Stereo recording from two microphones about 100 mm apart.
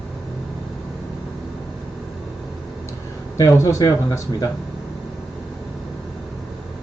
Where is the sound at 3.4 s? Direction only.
30° left (ahead or behind).